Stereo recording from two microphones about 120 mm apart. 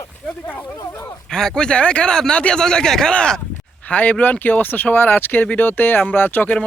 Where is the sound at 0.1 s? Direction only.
10° left (ahead or behind).